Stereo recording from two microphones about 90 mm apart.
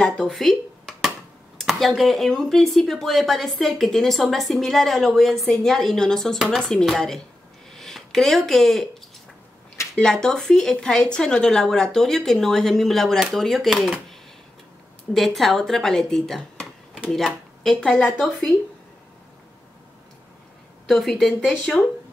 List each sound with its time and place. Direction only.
0.0 s dishes: 5° left (ahead or behind)
1.6 s speech: centre (ahead or behind)
7.7 s a sound: 5° left (ahead or behind)
9.9 s speech: 10° left (ahead or behind)
15.1 s speech: centre (ahead or behind)
20.8 s speech: 5° left (ahead or behind)